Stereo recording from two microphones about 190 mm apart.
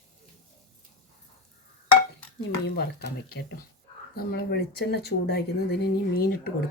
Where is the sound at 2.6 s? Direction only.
60° left (ahead or behind).